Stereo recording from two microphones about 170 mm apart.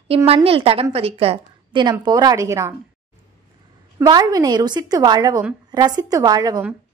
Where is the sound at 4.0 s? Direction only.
20° right (ahead or behind).